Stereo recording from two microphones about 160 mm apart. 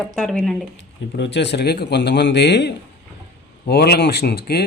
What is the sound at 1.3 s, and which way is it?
Speech, 90° left.